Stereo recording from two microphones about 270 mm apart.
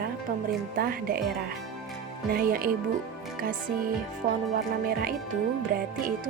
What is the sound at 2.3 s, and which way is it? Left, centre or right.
Speech, right.